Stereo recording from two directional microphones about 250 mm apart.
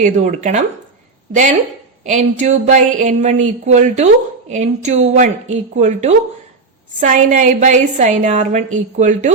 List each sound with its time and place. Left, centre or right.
0.0 s a woman's voice: right